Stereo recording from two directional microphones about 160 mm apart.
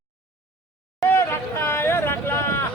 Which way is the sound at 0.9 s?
15° left (ahead or behind).